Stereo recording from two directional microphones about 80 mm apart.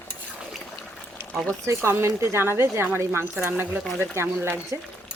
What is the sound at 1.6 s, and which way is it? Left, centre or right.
Speech, right.